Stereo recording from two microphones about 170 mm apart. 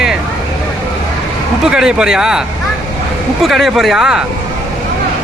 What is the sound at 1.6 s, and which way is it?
Speech, 5° right (ahead or behind).